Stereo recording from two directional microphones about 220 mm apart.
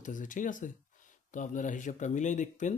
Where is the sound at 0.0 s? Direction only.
35° left (ahead or behind).